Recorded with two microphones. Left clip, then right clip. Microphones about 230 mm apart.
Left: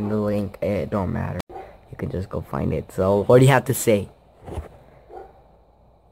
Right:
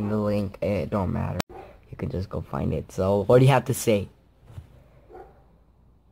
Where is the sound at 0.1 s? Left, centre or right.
Centre.